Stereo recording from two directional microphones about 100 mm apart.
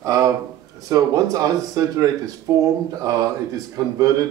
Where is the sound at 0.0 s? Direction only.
35° right (ahead or behind).